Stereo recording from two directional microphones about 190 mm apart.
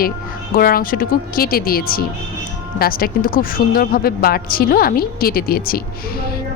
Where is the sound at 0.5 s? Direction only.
50° left (ahead or behind).